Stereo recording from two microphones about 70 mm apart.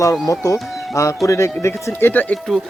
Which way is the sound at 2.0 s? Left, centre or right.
Left.